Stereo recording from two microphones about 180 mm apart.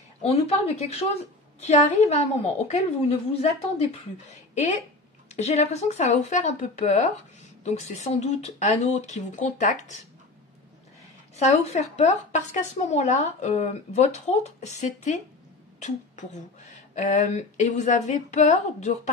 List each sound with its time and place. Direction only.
0.2 s a woman's voice: 35° left (ahead or behind)
5.3 s a woman's voice: 40° left (ahead or behind)
11.3 s a woman's voice: 40° left (ahead or behind)